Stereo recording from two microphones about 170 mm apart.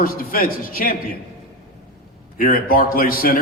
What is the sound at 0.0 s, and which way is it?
Speech, 55° left (ahead or behind).